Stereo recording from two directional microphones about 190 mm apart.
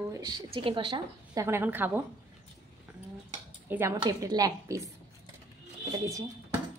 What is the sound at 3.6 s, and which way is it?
A woman's voice, 10° right (ahead or behind).